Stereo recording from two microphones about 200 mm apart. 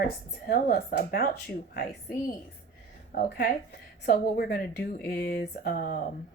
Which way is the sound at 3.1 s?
50° left (ahead or behind).